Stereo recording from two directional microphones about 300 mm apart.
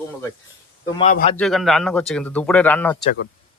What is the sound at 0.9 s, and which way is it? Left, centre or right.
Speech, centre.